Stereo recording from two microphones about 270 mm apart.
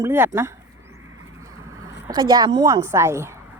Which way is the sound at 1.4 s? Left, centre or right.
Centre.